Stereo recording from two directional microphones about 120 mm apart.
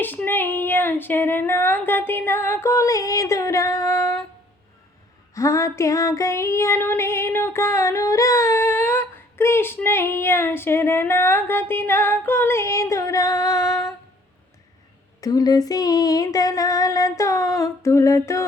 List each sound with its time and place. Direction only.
0.0 s speech: 15° left (ahead or behind)
5.3 s female singing: 25° left (ahead or behind)
15.2 s speech: 30° left (ahead or behind)